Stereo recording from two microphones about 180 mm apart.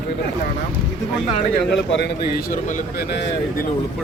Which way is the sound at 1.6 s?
70° left (ahead or behind).